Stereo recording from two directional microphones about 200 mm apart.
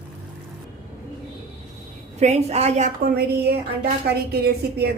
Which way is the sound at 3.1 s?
50° right (ahead or behind).